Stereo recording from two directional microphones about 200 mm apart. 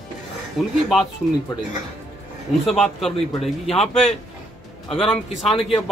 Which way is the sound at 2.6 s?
Centre (ahead or behind).